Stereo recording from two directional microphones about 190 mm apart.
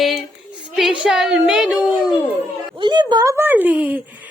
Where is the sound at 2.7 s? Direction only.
25° right (ahead or behind); by 4.2 s 10° right (ahead or behind).